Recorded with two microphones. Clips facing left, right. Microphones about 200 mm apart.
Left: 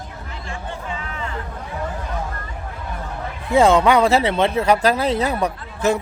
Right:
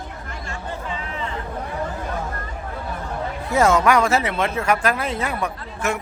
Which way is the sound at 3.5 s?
30° left (ahead or behind).